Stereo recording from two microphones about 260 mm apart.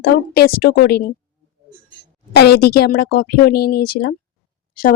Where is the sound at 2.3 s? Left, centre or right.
Left.